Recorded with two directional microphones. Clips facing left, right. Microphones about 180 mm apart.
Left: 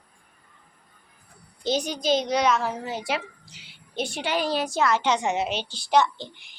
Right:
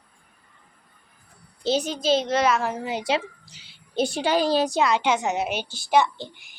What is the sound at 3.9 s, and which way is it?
Speech, 35° right (ahead or behind).